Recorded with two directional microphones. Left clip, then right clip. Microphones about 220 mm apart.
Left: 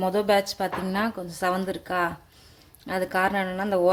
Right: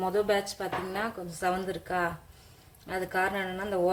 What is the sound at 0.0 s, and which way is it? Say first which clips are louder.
Speech: left 5 dB; 40° left (ahead or behind).